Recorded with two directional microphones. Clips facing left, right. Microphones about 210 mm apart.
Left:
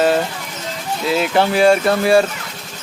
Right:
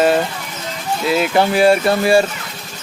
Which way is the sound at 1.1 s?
10° right (ahead or behind).